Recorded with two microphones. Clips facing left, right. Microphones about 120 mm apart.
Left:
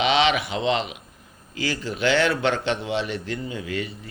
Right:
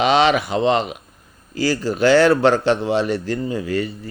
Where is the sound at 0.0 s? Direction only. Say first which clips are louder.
Right 5 dB; 40° right (ahead or behind).